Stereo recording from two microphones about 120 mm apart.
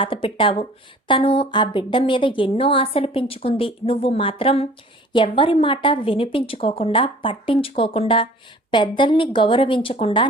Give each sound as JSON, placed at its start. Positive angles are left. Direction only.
{"t": 0.0, "sound": "a woman's voice", "side_deg": 45}